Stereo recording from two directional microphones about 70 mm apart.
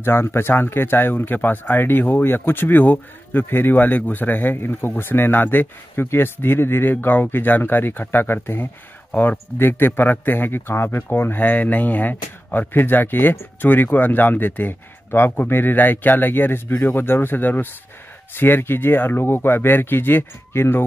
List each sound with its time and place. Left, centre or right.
0.0 s speech: left
9.1 s speech: centre
9.6 s speech: left